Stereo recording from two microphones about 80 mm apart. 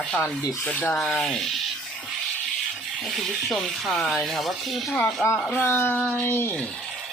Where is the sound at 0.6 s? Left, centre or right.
Centre.